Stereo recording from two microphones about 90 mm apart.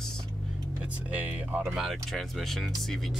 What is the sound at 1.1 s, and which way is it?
Speech, 20° right (ahead or behind).